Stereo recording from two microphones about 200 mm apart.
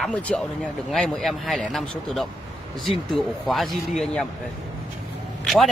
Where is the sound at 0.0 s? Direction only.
5° left (ahead or behind).